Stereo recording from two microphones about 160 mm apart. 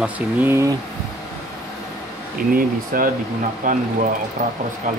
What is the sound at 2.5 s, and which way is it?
Speech, 60° right (ahead or behind).